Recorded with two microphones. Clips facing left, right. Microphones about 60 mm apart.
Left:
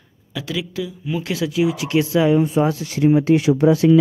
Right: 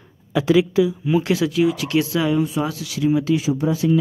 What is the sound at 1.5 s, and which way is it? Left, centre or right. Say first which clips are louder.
Speech: even; centre.